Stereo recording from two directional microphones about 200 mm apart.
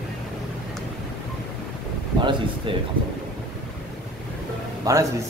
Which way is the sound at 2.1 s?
25° right (ahead or behind).